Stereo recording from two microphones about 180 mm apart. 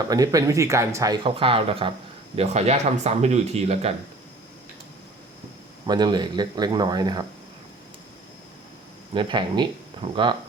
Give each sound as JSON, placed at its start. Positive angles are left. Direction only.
{"t": 0.1, "sound": "speech", "side_deg": -20}
{"t": 5.8, "sound": "speech", "side_deg": -25}
{"t": 9.1, "sound": "speech", "side_deg": -25}